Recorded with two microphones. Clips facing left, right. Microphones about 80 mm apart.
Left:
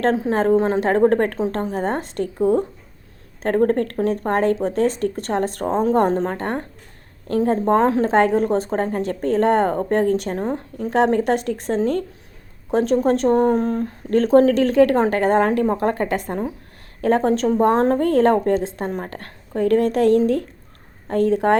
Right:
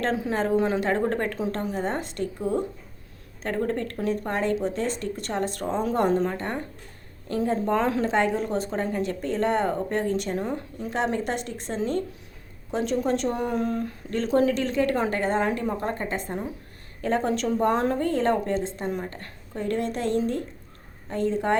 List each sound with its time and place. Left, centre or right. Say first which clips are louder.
0.0 s speech: left 7 dB; left